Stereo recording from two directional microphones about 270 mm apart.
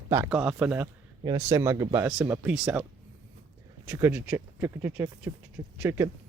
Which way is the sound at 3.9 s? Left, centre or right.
Centre.